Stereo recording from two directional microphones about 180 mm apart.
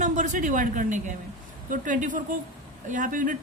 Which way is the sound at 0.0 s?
45° right (ahead or behind).